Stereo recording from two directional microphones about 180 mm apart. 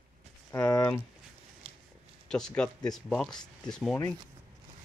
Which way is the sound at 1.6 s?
30° right (ahead or behind).